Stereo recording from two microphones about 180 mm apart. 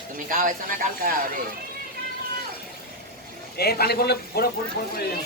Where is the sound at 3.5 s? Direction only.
60° left (ahead or behind).